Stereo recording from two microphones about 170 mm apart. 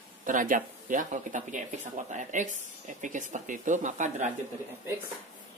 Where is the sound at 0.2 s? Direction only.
50° right (ahead or behind).